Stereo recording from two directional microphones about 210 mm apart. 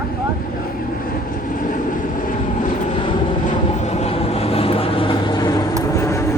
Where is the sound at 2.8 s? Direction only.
25° left (ahead or behind).